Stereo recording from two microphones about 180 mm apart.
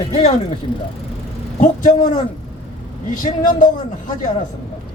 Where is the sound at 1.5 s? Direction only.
45° left (ahead or behind).